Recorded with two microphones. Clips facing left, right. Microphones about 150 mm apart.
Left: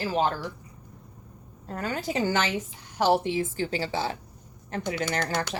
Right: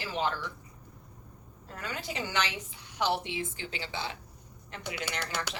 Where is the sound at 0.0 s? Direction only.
40° left (ahead or behind).